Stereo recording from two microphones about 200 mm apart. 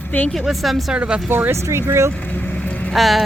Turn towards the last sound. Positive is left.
turn(degrees=0)  # may be behind; listen again after turning